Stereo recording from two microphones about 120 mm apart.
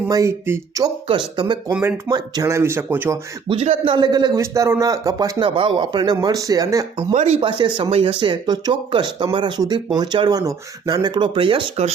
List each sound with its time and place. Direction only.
0.1 s speech: 25° right (ahead or behind)
1.0 s speech: 40° right (ahead or behind); by 3.2 s 20° right (ahead or behind)
3.5 s speech: 55° right (ahead or behind)
3.9 s speech: 35° right (ahead or behind)
5.4 s speech: 45° right (ahead or behind); by 6.8 s 30° right (ahead or behind)
7.1 s speech: 70° right (ahead or behind)
7.4 s speech: 45° right (ahead or behind)